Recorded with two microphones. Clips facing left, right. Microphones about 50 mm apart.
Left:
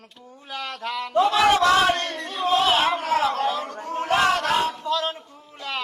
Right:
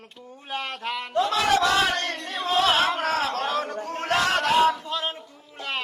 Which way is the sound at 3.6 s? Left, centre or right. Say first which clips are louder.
Left 2 dB; right.